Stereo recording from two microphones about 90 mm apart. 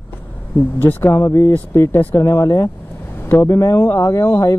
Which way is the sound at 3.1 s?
20° left (ahead or behind).